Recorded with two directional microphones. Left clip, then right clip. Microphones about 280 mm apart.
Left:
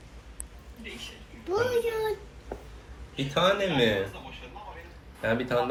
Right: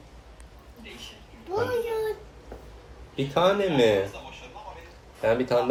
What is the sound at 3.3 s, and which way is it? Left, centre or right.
Speech, right.